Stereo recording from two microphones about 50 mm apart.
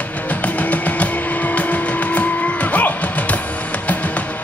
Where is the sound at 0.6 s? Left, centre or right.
Left.